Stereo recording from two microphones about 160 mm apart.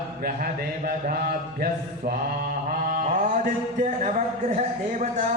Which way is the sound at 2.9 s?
55° right (ahead or behind).